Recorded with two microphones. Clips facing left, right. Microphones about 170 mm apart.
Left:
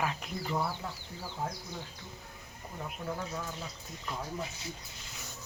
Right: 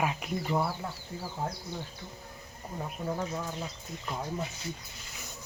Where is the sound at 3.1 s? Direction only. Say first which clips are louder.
Right 4 dB; 20° right (ahead or behind).